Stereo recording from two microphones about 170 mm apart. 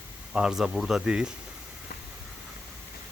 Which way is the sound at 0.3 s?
5° right (ahead or behind).